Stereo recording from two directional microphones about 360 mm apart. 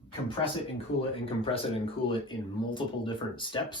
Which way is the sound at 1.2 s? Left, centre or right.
Centre.